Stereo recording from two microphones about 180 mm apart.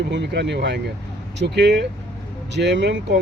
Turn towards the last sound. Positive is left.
turn(degrees=-75)  # may be behind; listen again after turning